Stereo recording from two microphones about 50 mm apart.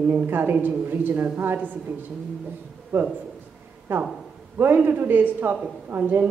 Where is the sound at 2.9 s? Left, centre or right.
Right.